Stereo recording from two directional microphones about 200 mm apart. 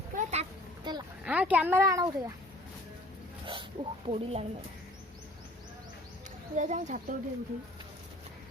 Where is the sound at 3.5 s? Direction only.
25° right (ahead or behind).